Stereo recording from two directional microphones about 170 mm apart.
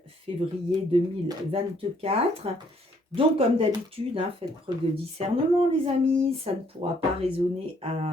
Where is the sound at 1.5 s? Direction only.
35° right (ahead or behind).